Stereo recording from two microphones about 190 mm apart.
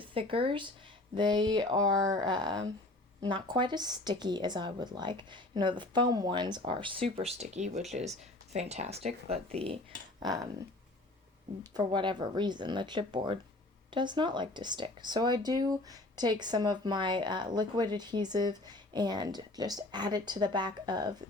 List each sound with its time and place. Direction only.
0.0 s speech: 30° right (ahead or behind)
10.2 s speech: 20° right (ahead or behind)
11.7 s speech: 25° right (ahead or behind)